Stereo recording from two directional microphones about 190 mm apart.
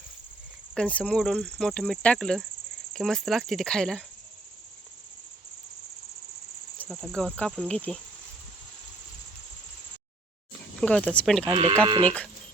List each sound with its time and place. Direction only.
0.7 s speech: 5° left (ahead or behind)
6.7 s speech: centre (ahead or behind)
10.8 s speech: 5° left (ahead or behind)
11.9 s speech: 25° right (ahead or behind)